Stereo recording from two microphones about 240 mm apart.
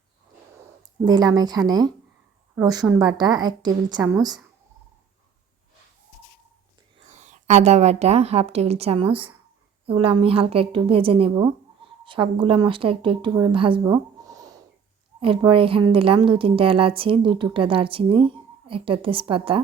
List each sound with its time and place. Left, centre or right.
1.0 s a woman's voice: centre
7.1 s a woman's voice: right